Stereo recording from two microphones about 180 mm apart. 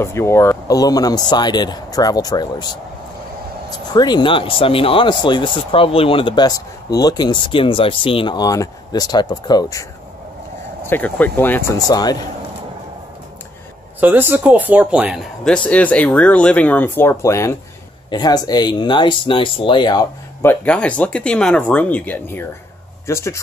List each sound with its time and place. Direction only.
0.0 s speech: 15° left (ahead or behind)
3.9 s speech: 25° left (ahead or behind)
10.9 s speech: 10° left (ahead or behind)
13.9 s speech: 10° right (ahead or behind)
15.4 s speech: 5° left (ahead or behind); by 20.1 s 25° left (ahead or behind)
20.4 s speech: 5° left (ahead or behind)